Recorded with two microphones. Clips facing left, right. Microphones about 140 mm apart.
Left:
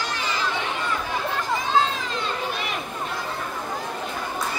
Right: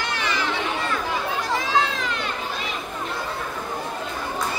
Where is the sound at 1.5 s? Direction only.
75° right (ahead or behind).